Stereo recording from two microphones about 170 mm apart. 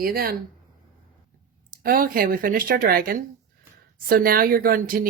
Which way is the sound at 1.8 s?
55° right (ahead or behind).